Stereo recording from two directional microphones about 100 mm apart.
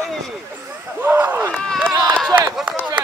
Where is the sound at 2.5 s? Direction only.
5° right (ahead or behind).